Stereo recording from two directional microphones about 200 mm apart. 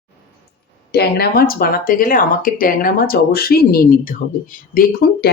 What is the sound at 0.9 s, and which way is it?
Speech, 50° left (ahead or behind).